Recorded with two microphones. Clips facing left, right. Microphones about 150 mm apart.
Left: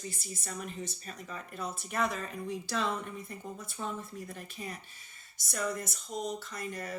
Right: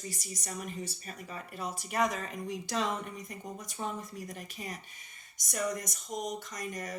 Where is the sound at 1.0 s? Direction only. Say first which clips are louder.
Even; 40° right (ahead or behind).